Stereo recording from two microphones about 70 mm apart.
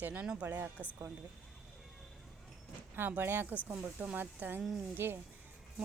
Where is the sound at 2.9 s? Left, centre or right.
Right.